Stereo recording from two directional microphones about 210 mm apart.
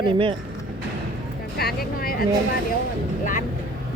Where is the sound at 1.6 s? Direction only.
45° left (ahead or behind).